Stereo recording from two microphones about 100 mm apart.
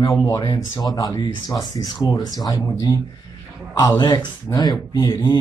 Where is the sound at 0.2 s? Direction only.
35° left (ahead or behind).